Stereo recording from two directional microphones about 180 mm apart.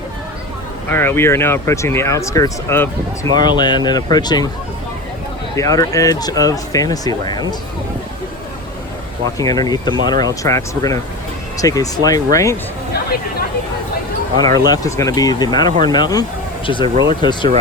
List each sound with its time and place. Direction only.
0.9 s speech: 10° left (ahead or behind)
3.3 s speech: 25° left (ahead or behind)
5.5 s speech: 20° left (ahead or behind)
9.4 s speech: 20° left (ahead or behind)
14.3 s speech: 20° left (ahead or behind)